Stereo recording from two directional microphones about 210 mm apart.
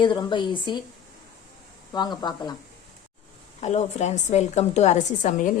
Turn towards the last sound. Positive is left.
turn(degrees=35)  # may be behind; listen again after turning